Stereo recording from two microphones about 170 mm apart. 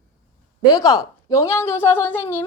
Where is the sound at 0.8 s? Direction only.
20° left (ahead or behind).